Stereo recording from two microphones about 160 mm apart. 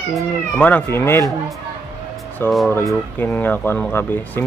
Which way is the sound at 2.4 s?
15° left (ahead or behind).